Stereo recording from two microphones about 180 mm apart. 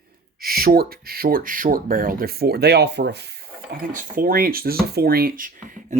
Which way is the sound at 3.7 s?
50° right (ahead or behind).